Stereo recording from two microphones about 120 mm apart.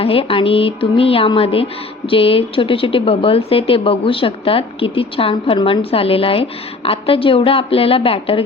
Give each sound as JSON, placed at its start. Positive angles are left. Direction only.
{"t": 0.0, "sound": "music", "side_deg": 50}